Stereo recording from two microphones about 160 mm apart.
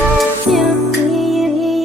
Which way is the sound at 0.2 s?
Centre (ahead or behind).